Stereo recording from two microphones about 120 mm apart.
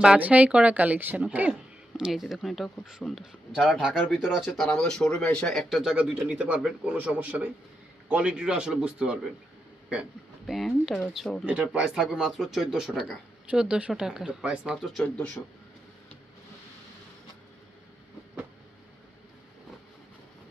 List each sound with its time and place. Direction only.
0.0 s speech: 10° right (ahead or behind)
11.4 s speech: 10° right (ahead or behind)
15.0 s a man's voice: 20° left (ahead or behind)